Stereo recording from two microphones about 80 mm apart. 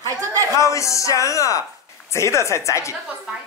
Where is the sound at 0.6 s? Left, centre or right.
Left.